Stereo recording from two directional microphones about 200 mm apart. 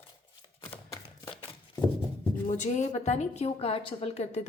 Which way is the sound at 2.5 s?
40° left (ahead or behind).